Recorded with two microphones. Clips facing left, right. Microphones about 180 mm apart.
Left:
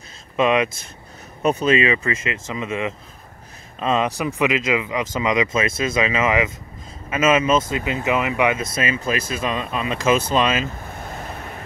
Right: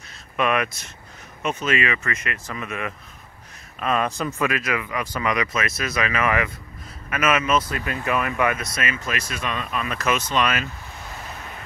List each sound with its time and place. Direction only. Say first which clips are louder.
0.4 s speech: left 4 dB; 20° left (ahead or behind)
1.4 s speech: left 6 dB; 35° left (ahead or behind)
10.9 s vehicle: left 5 dB; 50° left (ahead or behind)